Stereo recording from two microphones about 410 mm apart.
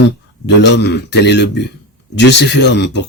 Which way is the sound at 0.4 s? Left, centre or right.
Left.